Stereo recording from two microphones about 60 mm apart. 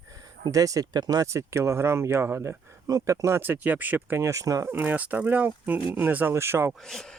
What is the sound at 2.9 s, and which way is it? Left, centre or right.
Speech, right.